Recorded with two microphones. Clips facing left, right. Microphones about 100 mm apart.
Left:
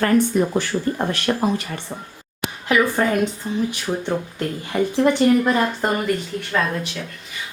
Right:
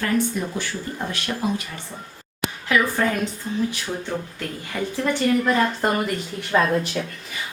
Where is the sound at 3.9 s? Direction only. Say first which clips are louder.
Left 5 dB; 25° left (ahead or behind).